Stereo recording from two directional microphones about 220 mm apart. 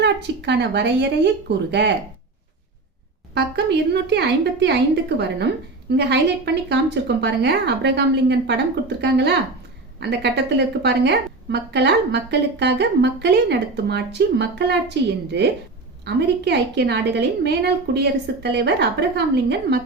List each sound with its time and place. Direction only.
0.0 s a woman's voice: 50° right (ahead or behind)
3.3 s a woman's voice: 50° right (ahead or behind)